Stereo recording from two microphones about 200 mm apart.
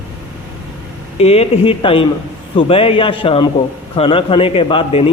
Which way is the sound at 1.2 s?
30° left (ahead or behind).